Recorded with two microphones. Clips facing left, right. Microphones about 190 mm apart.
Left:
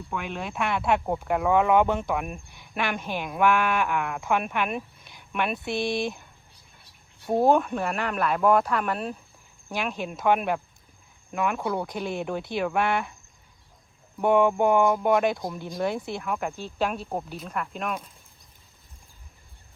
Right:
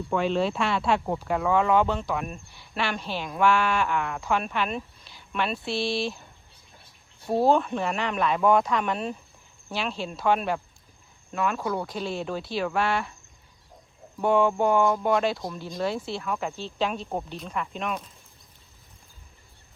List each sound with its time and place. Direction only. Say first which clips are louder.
0.3 s speech: right 1 dB; 15° left (ahead or behind)
7.3 s speech: left 1 dB; 15° left (ahead or behind)
7.6 s speech: even; 5° left (ahead or behind)
9.6 s speech: left 1 dB; 15° left (ahead or behind)
14.2 s speech: left 1 dB; 15° left (ahead or behind)